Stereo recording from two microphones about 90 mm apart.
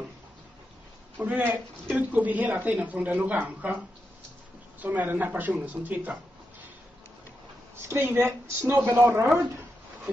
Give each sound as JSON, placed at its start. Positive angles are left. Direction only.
{"t": 1.1, "sound": "speech", "side_deg": -20}
{"t": 4.7, "sound": "speech", "side_deg": -20}
{"t": 7.7, "sound": "speech", "side_deg": -25}